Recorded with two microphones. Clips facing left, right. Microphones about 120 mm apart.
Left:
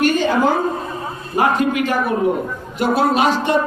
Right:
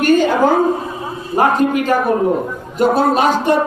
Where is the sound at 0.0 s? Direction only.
45° right (ahead or behind).